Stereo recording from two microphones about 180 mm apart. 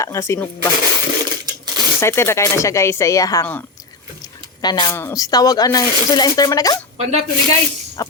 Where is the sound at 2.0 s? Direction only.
15° left (ahead or behind).